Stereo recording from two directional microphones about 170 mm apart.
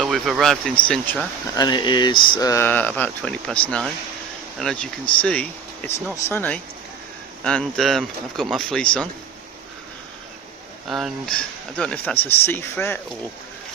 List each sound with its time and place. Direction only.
0.0 s speech: centre (ahead or behind)
1.5 s speech: 25° left (ahead or behind); by 9.0 s 5° left (ahead or behind)
10.8 s speech: centre (ahead or behind)